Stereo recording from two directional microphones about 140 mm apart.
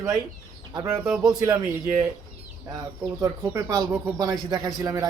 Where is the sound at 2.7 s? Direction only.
25° right (ahead or behind).